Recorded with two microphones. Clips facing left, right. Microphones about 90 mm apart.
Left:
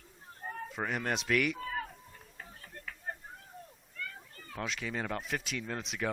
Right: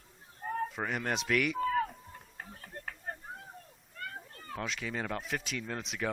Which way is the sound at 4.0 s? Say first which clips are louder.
Right 1 dB; 45° right (ahead or behind).